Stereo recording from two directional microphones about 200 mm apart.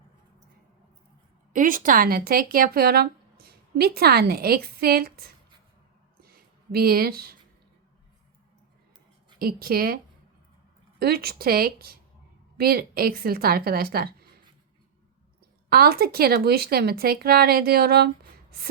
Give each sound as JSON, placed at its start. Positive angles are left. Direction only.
{"t": 1.5, "sound": "speech", "side_deg": -45}
{"t": 6.1, "sound": "a sound", "side_deg": -50}
{"t": 9.4, "sound": "speech", "side_deg": -50}
{"t": 11.0, "sound": "speech", "side_deg": -50}
{"t": 15.7, "sound": "speech", "side_deg": -50}